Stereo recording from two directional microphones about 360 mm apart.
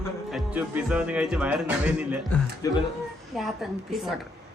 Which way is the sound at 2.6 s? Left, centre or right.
Centre.